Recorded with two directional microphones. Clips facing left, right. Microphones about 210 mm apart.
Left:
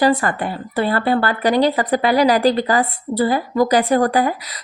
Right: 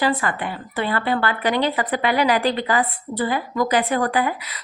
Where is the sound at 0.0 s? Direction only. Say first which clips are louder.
Left 5 dB; 45° left (ahead or behind).